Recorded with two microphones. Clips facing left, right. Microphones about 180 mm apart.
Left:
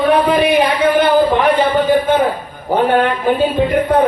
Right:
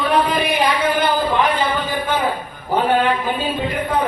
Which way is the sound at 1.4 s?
55° left (ahead or behind).